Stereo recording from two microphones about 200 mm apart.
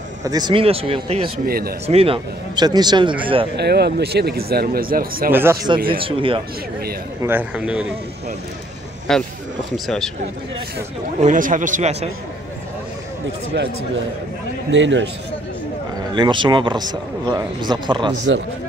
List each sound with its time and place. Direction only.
0.2 s speech: 20° right (ahead or behind)
1.4 s speech: 50° right (ahead or behind)
1.9 s speech: 30° right (ahead or behind)
3.5 s speech: 55° right (ahead or behind)
5.3 s speech: 10° right (ahead or behind)
5.9 s speech: 25° right (ahead or behind)
7.2 s a man's voice: 5° right (ahead or behind)
9.1 s a man's voice: centre (ahead or behind)
11.1 s speech: 40° right (ahead or behind)
13.5 s a man's voice: 60° right (ahead or behind)
16.1 s speech: 25° right (ahead or behind)